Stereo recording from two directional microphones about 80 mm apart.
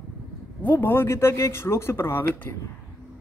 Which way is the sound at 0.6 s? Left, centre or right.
Left.